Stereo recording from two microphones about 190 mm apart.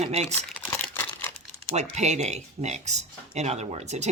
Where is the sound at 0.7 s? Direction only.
15° left (ahead or behind).